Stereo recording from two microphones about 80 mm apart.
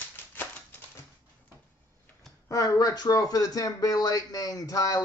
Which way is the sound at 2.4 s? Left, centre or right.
Left.